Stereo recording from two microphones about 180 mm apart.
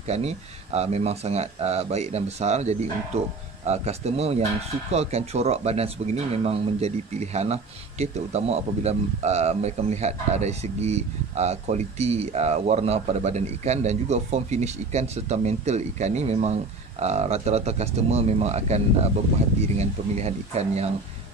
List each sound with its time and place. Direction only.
0.0 s a man's voice: 35° right (ahead or behind)
19.8 s a man's voice: 35° right (ahead or behind)